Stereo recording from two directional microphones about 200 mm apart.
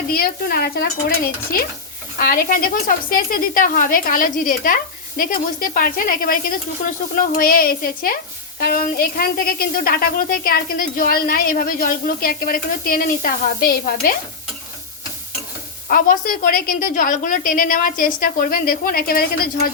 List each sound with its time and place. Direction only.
0.1 s a woman's voice: 50° left (ahead or behind)
2.1 s a woman's voice: 45° left (ahead or behind)
15.9 s a woman's voice: 45° left (ahead or behind)